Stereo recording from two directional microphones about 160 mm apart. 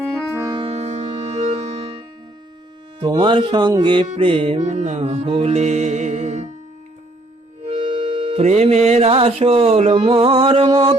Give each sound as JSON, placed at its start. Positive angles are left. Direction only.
{"t": 0.3, "sound": "music", "side_deg": -20}
{"t": 0.6, "sound": "music", "side_deg": -40}
{"t": 3.0, "sound": "speech", "side_deg": -25}
{"t": 4.0, "sound": "music", "side_deg": -40}
{"t": 7.7, "sound": "music", "side_deg": -45}